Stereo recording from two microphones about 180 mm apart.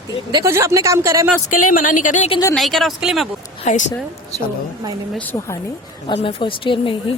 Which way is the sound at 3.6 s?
40° left (ahead or behind).